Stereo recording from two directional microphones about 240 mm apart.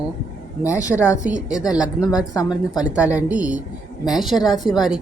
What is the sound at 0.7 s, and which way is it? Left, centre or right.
Speech, centre.